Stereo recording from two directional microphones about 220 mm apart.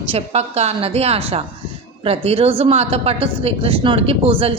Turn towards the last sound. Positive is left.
turn(degrees=-25)  # may be behind; listen again after turning